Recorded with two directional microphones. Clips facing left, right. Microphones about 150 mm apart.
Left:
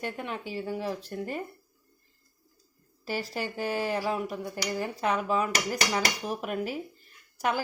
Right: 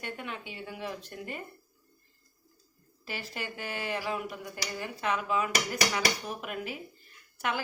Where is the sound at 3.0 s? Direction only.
40° left (ahead or behind).